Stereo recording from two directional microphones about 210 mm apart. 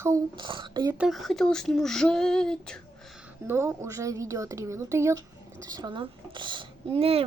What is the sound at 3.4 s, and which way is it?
Speech, 10° right (ahead or behind).